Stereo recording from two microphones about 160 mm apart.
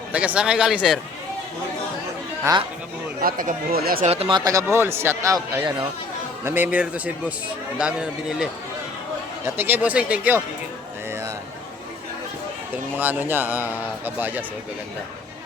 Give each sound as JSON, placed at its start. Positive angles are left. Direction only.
{"t": 0.1, "sound": "a man's voice", "side_deg": -10}
{"t": 2.4, "sound": "speech", "side_deg": -25}
{"t": 3.2, "sound": "speech", "side_deg": -60}
{"t": 4.0, "sound": "speech", "side_deg": -40}
{"t": 4.4, "sound": "a man's voice", "side_deg": -20}
{"t": 9.6, "sound": "a man's voice", "side_deg": -10}
{"t": 13.0, "sound": "a man's voice", "side_deg": -10}